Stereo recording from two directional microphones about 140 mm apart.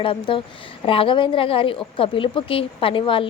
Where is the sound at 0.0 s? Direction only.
40° left (ahead or behind).